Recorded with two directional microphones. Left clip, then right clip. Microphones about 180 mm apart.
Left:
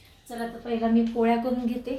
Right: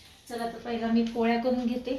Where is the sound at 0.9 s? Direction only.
10° left (ahead or behind).